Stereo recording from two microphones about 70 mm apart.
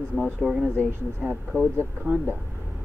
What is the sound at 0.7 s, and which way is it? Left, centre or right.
Speech, right.